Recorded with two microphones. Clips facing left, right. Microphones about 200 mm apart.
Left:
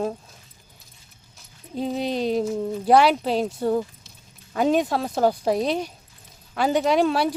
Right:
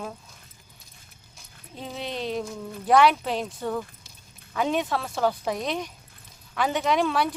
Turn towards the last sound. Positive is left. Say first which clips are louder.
# left 4 dB
turn(degrees=35)  # may be behind; listen again after turning